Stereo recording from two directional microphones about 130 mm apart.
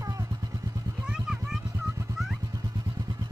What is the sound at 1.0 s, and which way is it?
Vehicle, 5° right (ahead or behind).